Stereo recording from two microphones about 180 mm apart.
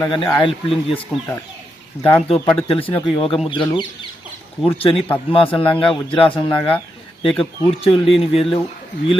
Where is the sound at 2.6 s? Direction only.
30° left (ahead or behind).